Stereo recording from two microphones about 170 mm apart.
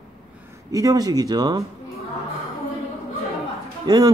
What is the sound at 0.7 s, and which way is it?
Speech, 20° right (ahead or behind).